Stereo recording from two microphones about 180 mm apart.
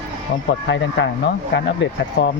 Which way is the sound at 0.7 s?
80° left.